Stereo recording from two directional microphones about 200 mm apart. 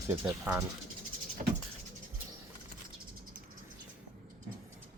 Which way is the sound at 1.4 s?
40° right (ahead or behind).